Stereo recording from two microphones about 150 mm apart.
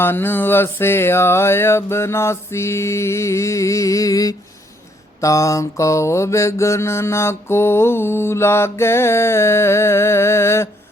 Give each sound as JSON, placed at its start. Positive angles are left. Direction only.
{"t": 0.0, "sound": "mantra", "side_deg": 15}